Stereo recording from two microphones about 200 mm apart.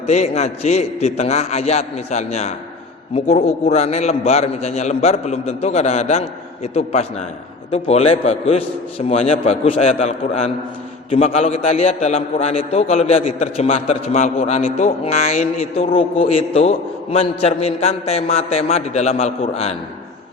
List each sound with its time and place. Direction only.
0.1 s a man's voice: 35° left (ahead or behind)